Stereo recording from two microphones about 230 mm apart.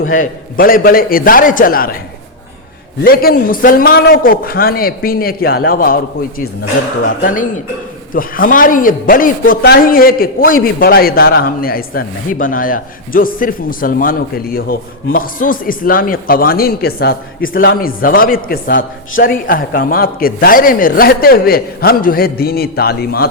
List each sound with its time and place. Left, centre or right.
0.1 s a man's voice: left
3.0 s a man's voice: left
7.0 s a man's voice: left